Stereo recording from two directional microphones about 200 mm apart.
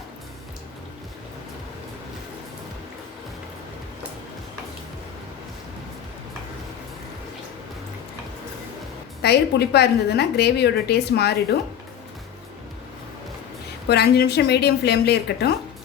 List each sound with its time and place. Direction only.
9.2 s a woman's voice: 55° left (ahead or behind)
13.8 s a woman's voice: 55° left (ahead or behind)